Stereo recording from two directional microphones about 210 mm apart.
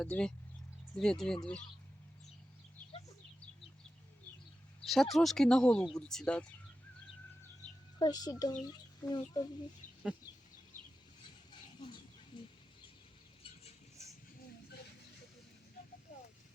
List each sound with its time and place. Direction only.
0.0 s speech: 5° left (ahead or behind)
4.8 s speech: centre (ahead or behind)
7.9 s a woman's voice: 20° left (ahead or behind)